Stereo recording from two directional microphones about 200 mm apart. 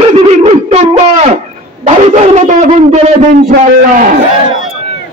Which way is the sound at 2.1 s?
35° right (ahead or behind).